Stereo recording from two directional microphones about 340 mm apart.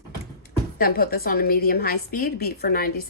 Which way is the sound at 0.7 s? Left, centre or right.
Left.